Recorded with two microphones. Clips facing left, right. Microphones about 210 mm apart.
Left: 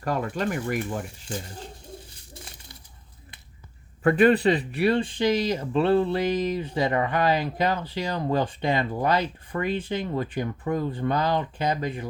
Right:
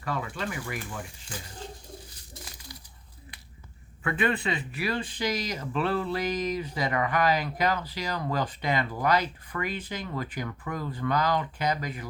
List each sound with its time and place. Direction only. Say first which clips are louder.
0.0 s speech: left 6 dB; 45° left (ahead or behind)
4.0 s speech: left 10 dB; 40° left (ahead or behind)